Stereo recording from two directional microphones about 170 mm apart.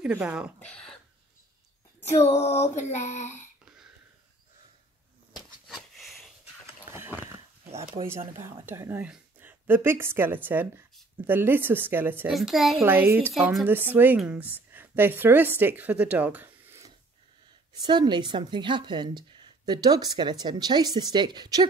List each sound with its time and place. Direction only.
0.0 s speech: 5° right (ahead or behind)
0.6 s speech: 5° left (ahead or behind)
2.2 s a sound: 40° left (ahead or behind)
2.8 s speech: 40° left (ahead or behind)
5.7 s sniff: centre (ahead or behind)
6.9 s a sound: 15° right (ahead or behind)
7.7 s speech: 35° right (ahead or behind)
8.3 s a woman's voice: 15° right (ahead or behind)
12.3 s a child's voice: centre (ahead or behind)
17.7 s speech: 25° right (ahead or behind)